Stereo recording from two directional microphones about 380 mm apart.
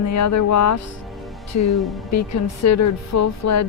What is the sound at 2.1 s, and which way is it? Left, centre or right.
Speech, left.